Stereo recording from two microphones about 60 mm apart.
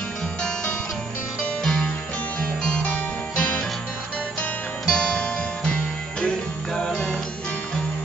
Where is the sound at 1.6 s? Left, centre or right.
Centre.